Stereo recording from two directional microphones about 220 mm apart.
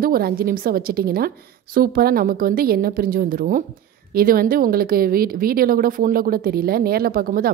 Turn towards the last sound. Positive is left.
turn(degrees=-40)  # may be behind; listen again after turning